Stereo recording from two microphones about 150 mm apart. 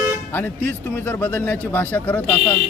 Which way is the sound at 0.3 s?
15° left (ahead or behind).